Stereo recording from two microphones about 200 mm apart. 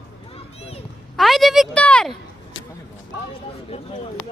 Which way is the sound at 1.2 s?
Centre (ahead or behind).